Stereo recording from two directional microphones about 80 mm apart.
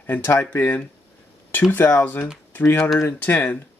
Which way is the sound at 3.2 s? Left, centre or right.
Left.